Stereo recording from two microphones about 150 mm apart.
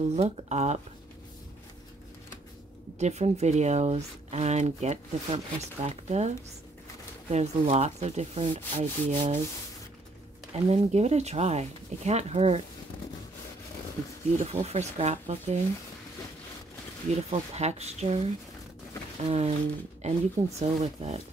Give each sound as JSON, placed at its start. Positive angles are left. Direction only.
{"t": 0.1, "sound": "speech", "side_deg": -50}
{"t": 3.0, "sound": "speech", "side_deg": -50}
{"t": 10.5, "sound": "speech", "side_deg": -45}
{"t": 14.3, "sound": "speech", "side_deg": -50}
{"t": 17.1, "sound": "speech", "side_deg": -45}